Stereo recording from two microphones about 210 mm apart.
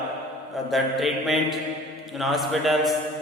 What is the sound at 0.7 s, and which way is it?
Mantra, centre (ahead or behind).